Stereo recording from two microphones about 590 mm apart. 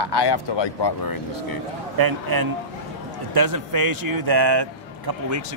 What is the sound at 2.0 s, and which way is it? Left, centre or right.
A man's voice, right.